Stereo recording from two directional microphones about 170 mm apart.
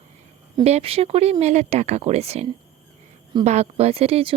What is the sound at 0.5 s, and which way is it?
Speech, 35° right (ahead or behind).